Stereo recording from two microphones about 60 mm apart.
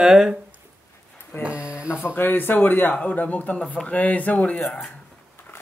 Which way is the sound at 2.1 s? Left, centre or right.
Left.